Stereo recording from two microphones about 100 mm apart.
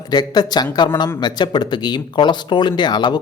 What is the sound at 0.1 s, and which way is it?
Speech, 45° left (ahead or behind).